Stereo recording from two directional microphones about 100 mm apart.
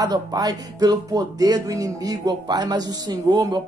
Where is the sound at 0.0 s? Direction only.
40° right (ahead or behind).